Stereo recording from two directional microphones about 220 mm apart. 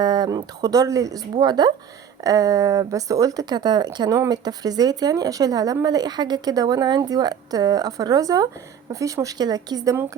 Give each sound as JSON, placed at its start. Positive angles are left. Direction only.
{"t": 0.0, "sound": "speech", "side_deg": -20}